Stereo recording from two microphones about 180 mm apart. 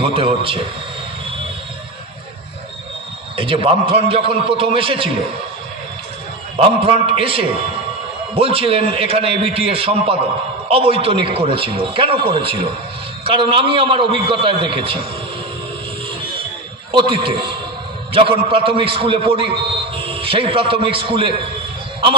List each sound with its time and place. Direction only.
0.0 s a man's voice: 30° right (ahead or behind)
3.3 s a man's voice: 30° right (ahead or behind)
6.5 s a man's voice: 30° right (ahead or behind)
16.9 s a man's voice: 30° right (ahead or behind)